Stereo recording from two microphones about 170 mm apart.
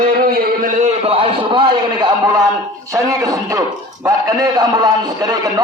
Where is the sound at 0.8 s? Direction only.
35° right (ahead or behind).